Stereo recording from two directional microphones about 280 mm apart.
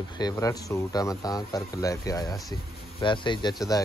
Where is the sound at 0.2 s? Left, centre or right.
Centre.